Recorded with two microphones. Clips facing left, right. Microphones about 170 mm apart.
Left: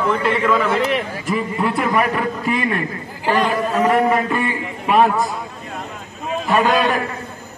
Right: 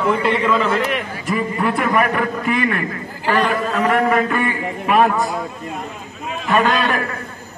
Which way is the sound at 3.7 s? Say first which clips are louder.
Left 1 dB; 30° left (ahead or behind).